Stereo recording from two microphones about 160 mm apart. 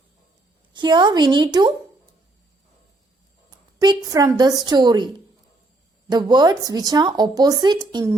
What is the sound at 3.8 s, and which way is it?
A woman's voice, 25° right (ahead or behind).